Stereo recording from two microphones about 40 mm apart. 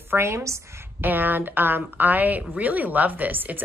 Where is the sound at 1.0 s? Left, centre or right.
Right.